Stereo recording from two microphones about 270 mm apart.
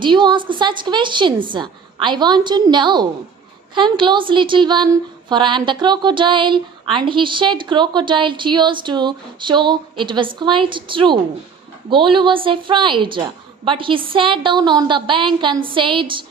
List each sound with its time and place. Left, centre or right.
0.0 s a woman's voice: centre